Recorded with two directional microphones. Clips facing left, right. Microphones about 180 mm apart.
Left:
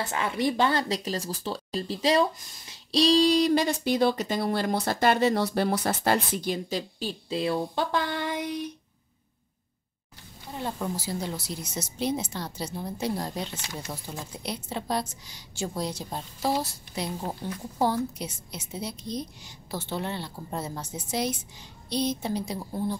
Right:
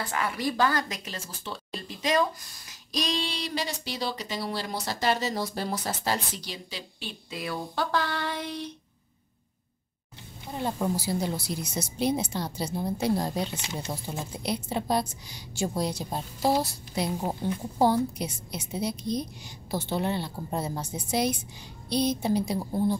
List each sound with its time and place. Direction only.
0.0 s speech: 25° left (ahead or behind)
10.4 s speech: 10° right (ahead or behind)